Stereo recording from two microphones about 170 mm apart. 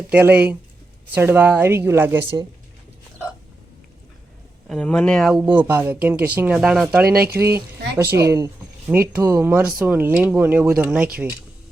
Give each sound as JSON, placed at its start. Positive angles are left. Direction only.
{"t": 0.1, "sound": "speech", "side_deg": -10}
{"t": 4.7, "sound": "speech", "side_deg": 5}
{"t": 7.1, "sound": "speech", "side_deg": -65}
{"t": 7.3, "sound": "speech", "side_deg": -15}
{"t": 8.0, "sound": "speech", "side_deg": -75}
{"t": 8.9, "sound": "speech", "side_deg": -15}